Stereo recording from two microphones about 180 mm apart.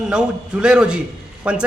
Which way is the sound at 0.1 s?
5° right (ahead or behind).